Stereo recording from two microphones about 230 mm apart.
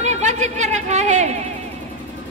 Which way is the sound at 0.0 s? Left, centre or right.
Right.